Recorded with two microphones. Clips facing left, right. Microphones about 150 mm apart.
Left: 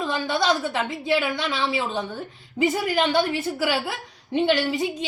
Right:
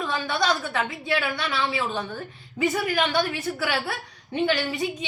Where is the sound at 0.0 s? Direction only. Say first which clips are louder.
Left 2 dB; 25° left (ahead or behind).